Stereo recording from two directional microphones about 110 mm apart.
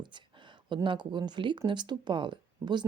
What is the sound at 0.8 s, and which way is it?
Speech, 45° right (ahead or behind).